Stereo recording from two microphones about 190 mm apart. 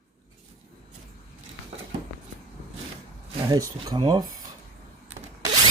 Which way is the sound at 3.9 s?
20° right (ahead or behind).